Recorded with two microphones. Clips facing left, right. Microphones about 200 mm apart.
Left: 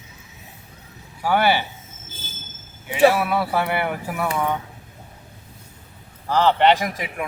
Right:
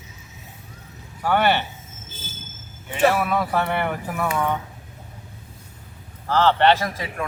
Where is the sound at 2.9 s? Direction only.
10° left (ahead or behind).